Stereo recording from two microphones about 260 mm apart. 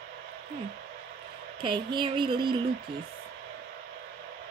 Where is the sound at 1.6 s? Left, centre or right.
Centre.